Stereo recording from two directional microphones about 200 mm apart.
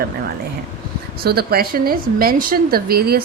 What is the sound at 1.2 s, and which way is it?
A woman's voice, 50° right (ahead or behind).